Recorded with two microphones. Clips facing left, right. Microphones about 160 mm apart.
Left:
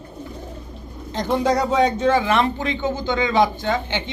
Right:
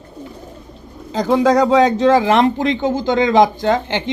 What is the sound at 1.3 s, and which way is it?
Speech, 90° right.